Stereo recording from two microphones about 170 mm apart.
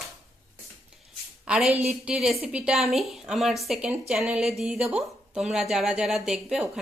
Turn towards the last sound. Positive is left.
turn(degrees=0)  # may be behind; listen again after turning